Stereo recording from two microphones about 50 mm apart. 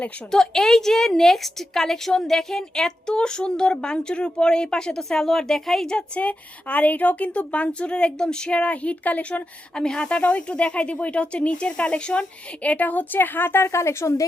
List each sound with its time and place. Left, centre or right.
0.3 s a woman's voice: centre
6.1 s speech: left
9.7 s a woman's voice: centre
12.6 s a woman's voice: left